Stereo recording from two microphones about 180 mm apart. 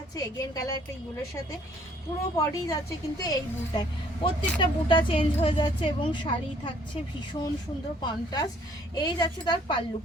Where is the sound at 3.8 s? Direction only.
25° left (ahead or behind).